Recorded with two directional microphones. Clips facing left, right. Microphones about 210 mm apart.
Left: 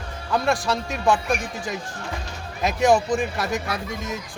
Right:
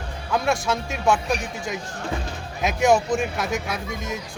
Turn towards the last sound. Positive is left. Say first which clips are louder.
# even
turn(degrees=0)  # may be behind; listen again after turning